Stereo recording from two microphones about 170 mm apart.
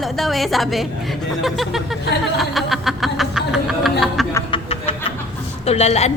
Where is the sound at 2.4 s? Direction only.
Centre (ahead or behind).